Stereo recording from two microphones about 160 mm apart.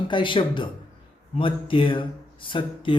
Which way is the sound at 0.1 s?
30° left (ahead or behind).